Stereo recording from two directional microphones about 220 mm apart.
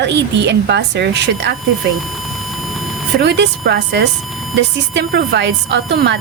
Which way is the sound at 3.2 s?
50° right (ahead or behind).